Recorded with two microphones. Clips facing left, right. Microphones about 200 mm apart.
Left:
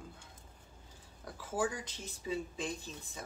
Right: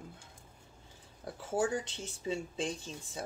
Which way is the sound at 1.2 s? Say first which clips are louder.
Right 3 dB; 30° right (ahead or behind).